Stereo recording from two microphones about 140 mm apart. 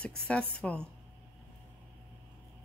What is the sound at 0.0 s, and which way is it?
Speech, 10° left (ahead or behind).